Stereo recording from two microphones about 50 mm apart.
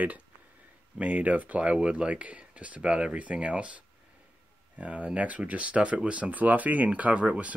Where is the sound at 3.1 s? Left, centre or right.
Right.